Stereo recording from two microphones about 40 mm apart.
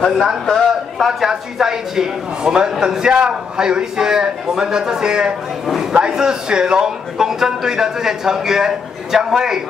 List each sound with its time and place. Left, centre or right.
0.5 s a man's voice: centre
1.3 s a man's voice: centre